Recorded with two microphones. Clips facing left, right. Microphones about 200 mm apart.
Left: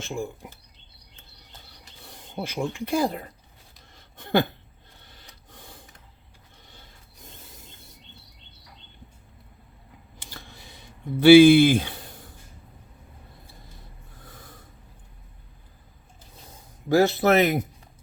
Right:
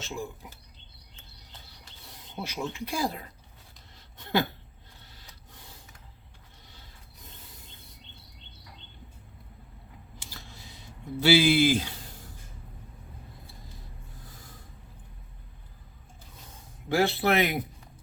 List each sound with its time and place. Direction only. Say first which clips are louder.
0.0 s speech: left 5 dB; 50° left (ahead or behind)
2.0 s speech: left 5 dB; 50° left (ahead or behind)
3.9 s a sound: left 5 dB; 50° left (ahead or behind)
5.1 s rub: left 5 dB; 55° left (ahead or behind)
10.2 s a sound: left 4 dB; 60° left (ahead or behind)
11.2 s speech: left 10 dB; 55° left (ahead or behind)
16.9 s speech: left 6 dB; 40° left (ahead or behind)